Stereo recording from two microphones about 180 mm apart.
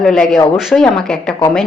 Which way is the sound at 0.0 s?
5° left (ahead or behind).